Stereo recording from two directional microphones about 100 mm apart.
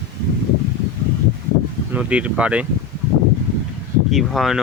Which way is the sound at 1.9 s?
10° right (ahead or behind).